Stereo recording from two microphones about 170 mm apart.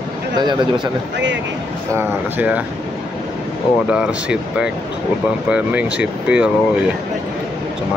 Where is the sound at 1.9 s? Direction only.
10° right (ahead or behind).